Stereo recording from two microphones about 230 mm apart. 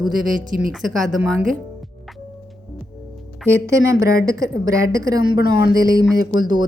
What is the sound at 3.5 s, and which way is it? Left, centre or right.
A woman's voice, centre.